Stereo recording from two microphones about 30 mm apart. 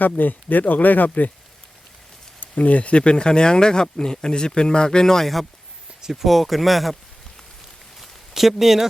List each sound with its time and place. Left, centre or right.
0.0 s speech: left
2.6 s speech: left
5.2 s speech: centre
8.3 s speech: centre